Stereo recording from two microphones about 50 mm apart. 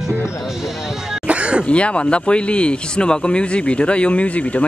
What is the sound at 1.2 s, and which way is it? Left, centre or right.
Throat clearing, right.